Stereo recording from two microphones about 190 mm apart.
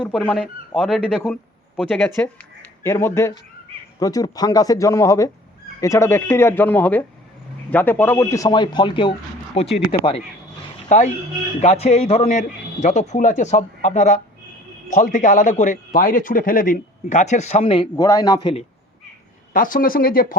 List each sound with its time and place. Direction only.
0.1 s a man's voice: 5° left (ahead or behind)
19.5 s speech: 45° left (ahead or behind)